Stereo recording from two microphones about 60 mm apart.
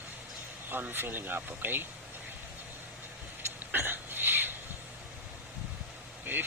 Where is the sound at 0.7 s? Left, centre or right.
Right.